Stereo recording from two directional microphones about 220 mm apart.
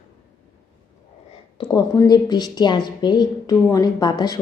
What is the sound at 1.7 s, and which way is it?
A woman's voice, 20° left (ahead or behind).